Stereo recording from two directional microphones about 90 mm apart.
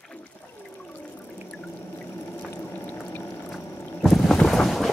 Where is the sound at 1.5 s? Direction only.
15° left (ahead or behind).